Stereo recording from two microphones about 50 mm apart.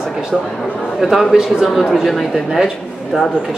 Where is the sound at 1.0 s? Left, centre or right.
Centre.